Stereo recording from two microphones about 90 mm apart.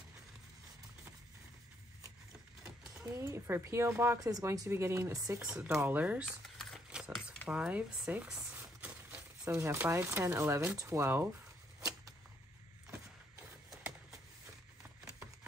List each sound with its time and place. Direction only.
3.2 s speech: 35° right (ahead or behind)
4.2 s speech: 40° right (ahead or behind)
4.6 s speech: 30° right (ahead or behind)
5.7 s speech: 25° right (ahead or behind)
6.9 s a sound: 5° right (ahead or behind)
7.4 s speech: 10° right (ahead or behind)
8.5 s a sound: 15° right (ahead or behind)
9.6 s speech: 25° right (ahead or behind)
10.8 s speech: 30° right (ahead or behind)